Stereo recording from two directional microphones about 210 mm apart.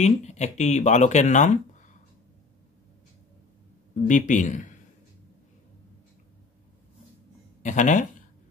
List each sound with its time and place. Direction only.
0.0 s speech: 35° left (ahead or behind)
4.1 s speech: 35° left (ahead or behind)
7.6 s speech: 35° left (ahead or behind)